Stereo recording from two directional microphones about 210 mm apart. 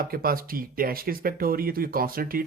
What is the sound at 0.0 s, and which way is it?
Speech, 45° right (ahead or behind).